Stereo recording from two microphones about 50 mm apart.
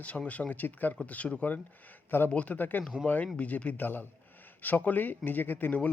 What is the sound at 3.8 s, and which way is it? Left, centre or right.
A man's voice, left.